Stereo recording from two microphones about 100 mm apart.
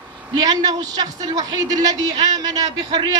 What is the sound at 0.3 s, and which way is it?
A man's voice, 40° right (ahead or behind).